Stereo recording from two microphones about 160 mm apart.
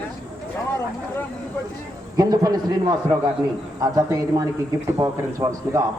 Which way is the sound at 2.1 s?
25° right (ahead or behind).